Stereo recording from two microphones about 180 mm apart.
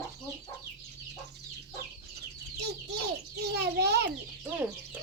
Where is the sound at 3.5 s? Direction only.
65° right (ahead or behind).